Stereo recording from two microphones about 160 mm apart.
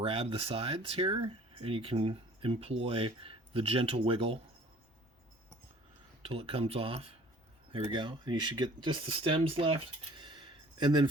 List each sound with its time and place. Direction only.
0.0 s speech: 35° right (ahead or behind)
6.2 s speech: 35° right (ahead or behind)